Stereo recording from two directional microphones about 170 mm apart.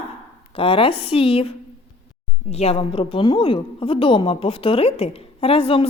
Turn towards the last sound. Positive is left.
turn(degrees=35)  # may be behind; listen again after turning